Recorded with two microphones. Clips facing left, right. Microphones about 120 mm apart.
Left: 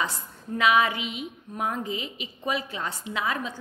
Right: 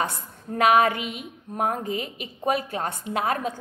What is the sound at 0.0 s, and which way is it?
A woman's voice, 50° right (ahead or behind).